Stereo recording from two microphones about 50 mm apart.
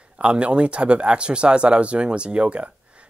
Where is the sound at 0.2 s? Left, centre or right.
Right.